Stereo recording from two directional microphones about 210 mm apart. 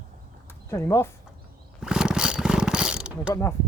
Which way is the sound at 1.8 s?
5° right (ahead or behind).